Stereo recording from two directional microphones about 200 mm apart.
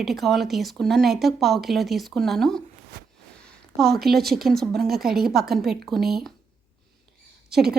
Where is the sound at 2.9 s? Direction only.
55° right (ahead or behind).